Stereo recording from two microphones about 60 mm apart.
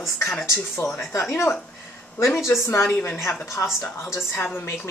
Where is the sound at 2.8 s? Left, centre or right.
Left.